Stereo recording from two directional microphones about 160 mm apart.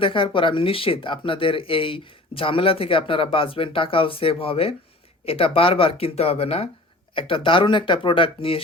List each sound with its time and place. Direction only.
0.0 s speech: 35° left (ahead or behind)